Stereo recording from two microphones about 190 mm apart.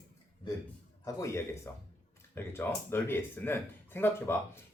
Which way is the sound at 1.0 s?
15° left (ahead or behind).